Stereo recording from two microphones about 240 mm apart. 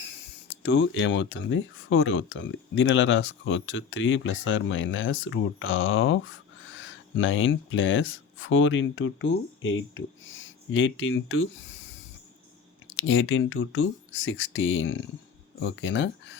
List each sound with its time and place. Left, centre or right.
0.5 s speech: left
13.0 s speech: left